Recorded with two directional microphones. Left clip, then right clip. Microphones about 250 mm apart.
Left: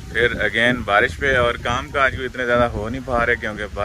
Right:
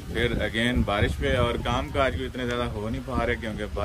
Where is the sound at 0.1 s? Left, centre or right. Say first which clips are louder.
Left 8 dB; centre.